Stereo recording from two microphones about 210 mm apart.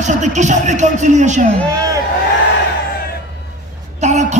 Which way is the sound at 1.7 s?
15° right (ahead or behind).